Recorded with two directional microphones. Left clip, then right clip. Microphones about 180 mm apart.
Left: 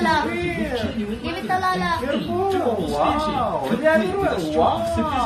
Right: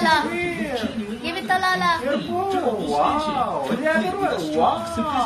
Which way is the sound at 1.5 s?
45° right (ahead or behind).